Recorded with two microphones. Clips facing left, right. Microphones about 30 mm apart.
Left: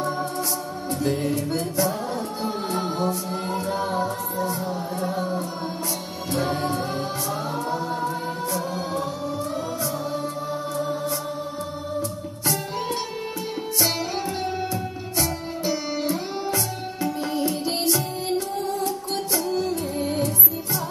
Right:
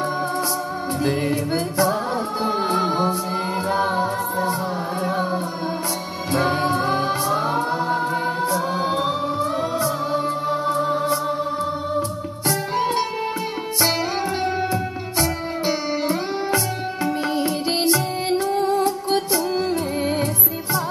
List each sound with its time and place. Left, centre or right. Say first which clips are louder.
1.0 s music: right 2 dB; right
12.4 s music: right 5 dB; right
14.6 s music: right 5 dB; right